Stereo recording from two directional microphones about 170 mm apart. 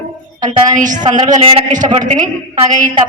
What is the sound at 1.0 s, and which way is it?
Speech, 30° right (ahead or behind).